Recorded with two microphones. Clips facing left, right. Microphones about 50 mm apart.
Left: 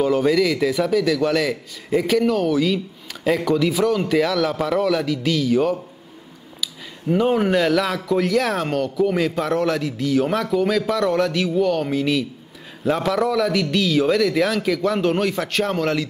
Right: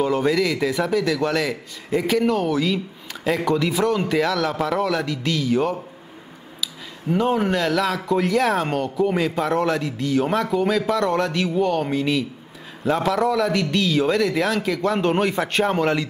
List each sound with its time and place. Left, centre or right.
0.0 s a man's voice: centre
8.8 s a man's voice: centre
9.1 s a man's voice: centre